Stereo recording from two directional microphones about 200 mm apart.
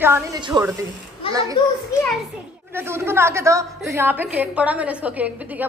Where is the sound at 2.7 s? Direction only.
10° right (ahead or behind).